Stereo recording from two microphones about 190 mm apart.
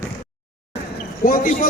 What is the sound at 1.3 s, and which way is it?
Speech, 45° left (ahead or behind).